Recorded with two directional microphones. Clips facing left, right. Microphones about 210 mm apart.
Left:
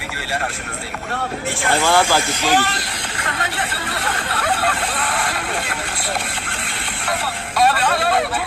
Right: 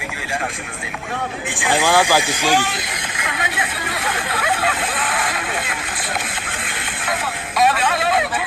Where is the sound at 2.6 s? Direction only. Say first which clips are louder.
Even; 5° right (ahead or behind).